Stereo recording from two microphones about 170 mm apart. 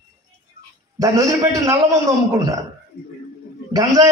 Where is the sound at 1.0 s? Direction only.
20° right (ahead or behind).